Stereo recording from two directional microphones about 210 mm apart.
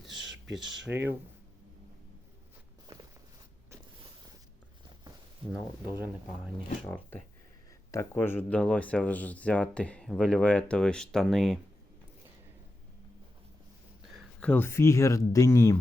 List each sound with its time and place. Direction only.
0.1 s a sound: 60° right (ahead or behind)
0.9 s speech: 10° right (ahead or behind)
2.8 s walk: 20° right (ahead or behind)
6.8 s speech: 10° left (ahead or behind)
14.1 s speech: centre (ahead or behind)